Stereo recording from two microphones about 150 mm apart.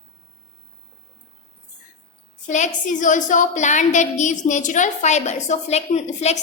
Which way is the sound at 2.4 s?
55° left (ahead or behind).